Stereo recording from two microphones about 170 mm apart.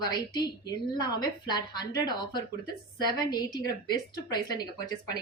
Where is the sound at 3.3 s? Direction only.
25° left (ahead or behind).